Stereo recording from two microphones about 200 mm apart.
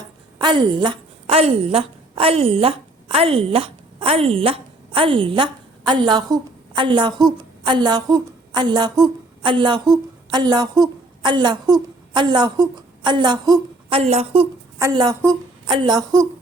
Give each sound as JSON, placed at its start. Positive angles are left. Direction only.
{"t": 0.3, "sound": "a woman's voice", "side_deg": -25}
{"t": 14.0, "sound": "a woman's voice", "side_deg": -30}
{"t": 14.8, "sound": "a woman's voice", "side_deg": -20}